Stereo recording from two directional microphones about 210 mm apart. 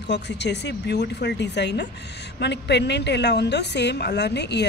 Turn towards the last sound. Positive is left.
turn(degrees=55)  # may be behind; listen again after turning